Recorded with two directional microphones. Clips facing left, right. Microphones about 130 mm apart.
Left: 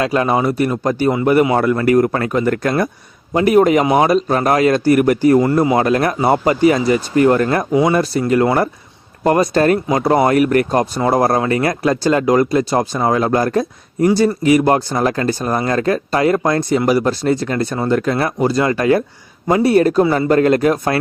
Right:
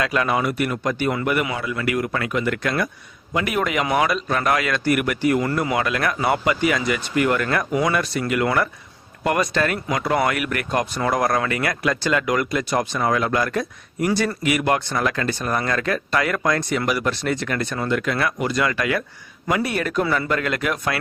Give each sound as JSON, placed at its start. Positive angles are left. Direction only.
{"t": 0.0, "sound": "speech", "side_deg": 30}
{"t": 1.5, "sound": "speech", "side_deg": 45}